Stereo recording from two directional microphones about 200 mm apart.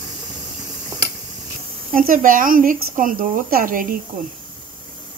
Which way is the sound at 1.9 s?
45° right (ahead or behind).